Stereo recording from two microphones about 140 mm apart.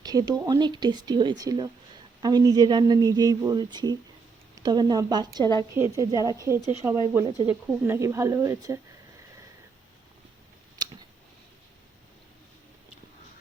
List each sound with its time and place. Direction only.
0.0 s speech: 25° right (ahead or behind)
7.4 s speech: 10° right (ahead or behind)
7.9 s speech: 20° right (ahead or behind)